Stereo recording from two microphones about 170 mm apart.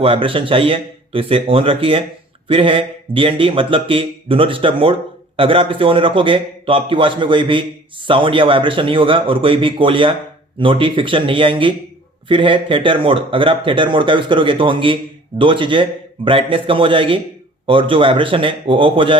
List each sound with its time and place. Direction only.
0.0 s a man's voice: 30° right (ahead or behind)